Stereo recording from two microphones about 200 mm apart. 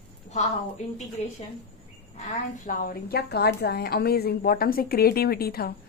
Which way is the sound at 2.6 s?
45° left (ahead or behind).